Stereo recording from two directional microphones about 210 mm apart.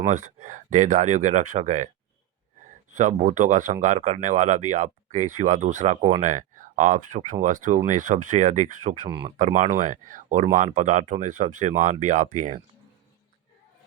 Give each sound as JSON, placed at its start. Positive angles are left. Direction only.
{"t": 0.1, "sound": "speech", "side_deg": -35}
{"t": 2.9, "sound": "speech", "side_deg": -35}
{"t": 9.0, "sound": "speech", "side_deg": -20}
{"t": 9.4, "sound": "speech", "side_deg": -35}